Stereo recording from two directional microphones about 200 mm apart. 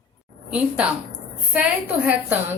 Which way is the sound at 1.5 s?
5° right (ahead or behind).